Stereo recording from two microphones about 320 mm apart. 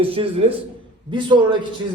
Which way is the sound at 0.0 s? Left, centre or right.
Centre.